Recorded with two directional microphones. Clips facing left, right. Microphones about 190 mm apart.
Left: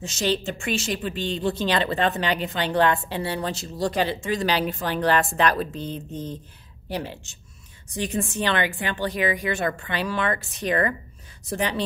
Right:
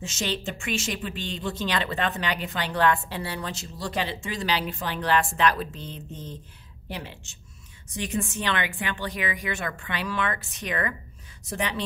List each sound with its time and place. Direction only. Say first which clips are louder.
0.0 s a woman's voice: left 5 dB; 35° left (ahead or behind)